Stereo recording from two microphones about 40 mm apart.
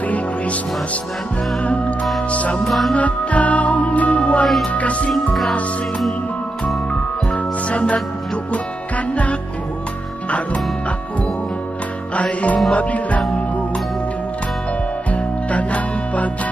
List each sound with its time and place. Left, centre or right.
1.6 s music: left
5.1 s music: centre
6.9 s music: left
12.2 s music: left
15.0 s music: left